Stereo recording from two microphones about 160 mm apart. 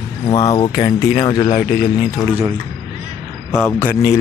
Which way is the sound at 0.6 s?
35° left (ahead or behind).